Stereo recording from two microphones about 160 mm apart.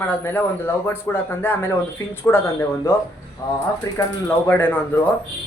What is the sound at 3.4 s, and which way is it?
Speech, 25° left (ahead or behind).